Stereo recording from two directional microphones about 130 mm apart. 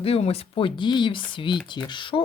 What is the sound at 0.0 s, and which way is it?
Speech, 50° left (ahead or behind).